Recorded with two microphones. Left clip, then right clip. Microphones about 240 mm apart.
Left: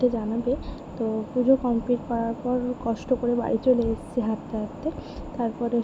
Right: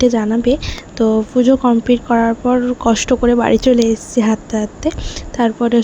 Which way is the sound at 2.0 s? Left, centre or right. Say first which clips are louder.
Right 13 dB; right.